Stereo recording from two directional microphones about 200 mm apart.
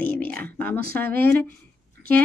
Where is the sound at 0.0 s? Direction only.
10° left (ahead or behind).